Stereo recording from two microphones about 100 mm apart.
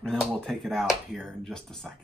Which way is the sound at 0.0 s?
5° left (ahead or behind).